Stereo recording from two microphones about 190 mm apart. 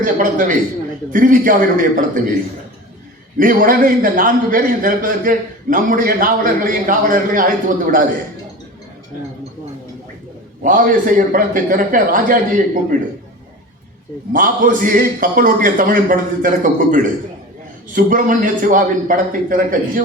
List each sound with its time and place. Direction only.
0.0 s a man's voice: 45° right (ahead or behind)
3.3 s a man's voice: 45° right (ahead or behind)
10.6 s a man's voice: 45° right (ahead or behind)
14.3 s a man's voice: 45° right (ahead or behind)